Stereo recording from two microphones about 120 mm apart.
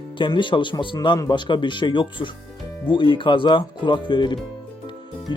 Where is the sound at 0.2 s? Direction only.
40° left (ahead or behind).